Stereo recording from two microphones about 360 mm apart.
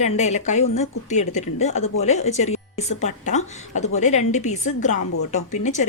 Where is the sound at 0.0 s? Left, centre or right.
Centre.